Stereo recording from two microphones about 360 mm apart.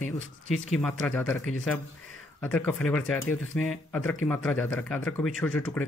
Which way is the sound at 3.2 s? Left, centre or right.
Left.